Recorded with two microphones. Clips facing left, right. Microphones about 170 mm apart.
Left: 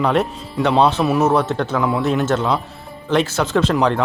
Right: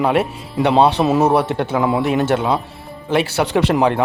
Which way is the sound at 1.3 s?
10° right (ahead or behind).